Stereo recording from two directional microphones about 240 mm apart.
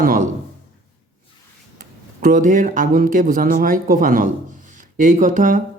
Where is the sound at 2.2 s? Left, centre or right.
Right.